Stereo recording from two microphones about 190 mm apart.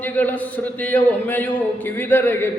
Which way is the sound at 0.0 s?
10° left (ahead or behind).